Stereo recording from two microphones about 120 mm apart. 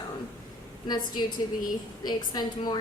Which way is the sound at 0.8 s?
35° left (ahead or behind).